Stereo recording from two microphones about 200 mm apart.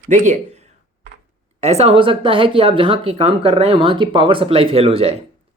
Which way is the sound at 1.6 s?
30° right (ahead or behind).